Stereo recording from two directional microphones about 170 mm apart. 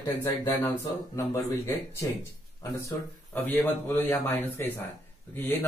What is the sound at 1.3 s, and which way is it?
A man's voice, 15° left (ahead or behind).